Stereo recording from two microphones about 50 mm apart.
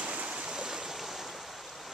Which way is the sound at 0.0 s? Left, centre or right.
Right.